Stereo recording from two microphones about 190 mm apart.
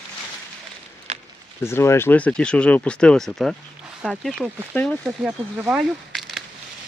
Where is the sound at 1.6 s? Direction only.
15° left (ahead or behind).